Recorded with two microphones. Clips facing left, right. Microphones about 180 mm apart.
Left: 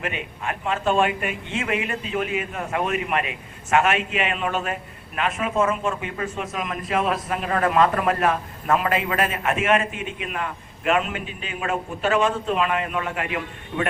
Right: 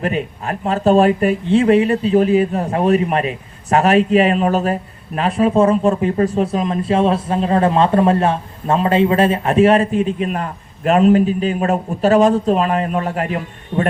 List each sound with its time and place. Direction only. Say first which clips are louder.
0.0 s speech: right 8 dB; 40° right (ahead or behind)